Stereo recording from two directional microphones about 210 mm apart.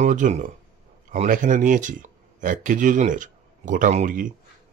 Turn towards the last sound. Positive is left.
turn(degrees=-40)  # may be behind; listen again after turning